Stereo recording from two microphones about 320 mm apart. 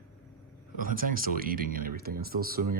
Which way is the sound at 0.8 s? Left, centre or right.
Right.